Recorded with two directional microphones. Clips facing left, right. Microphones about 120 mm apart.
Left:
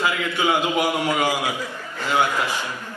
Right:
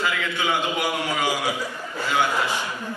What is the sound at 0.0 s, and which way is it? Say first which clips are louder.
A man's voice: left 3 dB; 15° left (ahead or behind).